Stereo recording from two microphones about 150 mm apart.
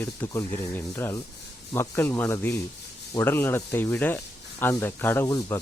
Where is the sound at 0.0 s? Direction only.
15° left (ahead or behind).